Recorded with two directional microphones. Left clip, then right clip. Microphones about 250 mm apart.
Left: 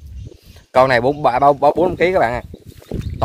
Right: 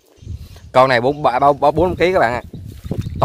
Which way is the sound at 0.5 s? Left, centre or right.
Centre.